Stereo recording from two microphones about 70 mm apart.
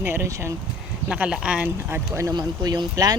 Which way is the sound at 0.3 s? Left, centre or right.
Right.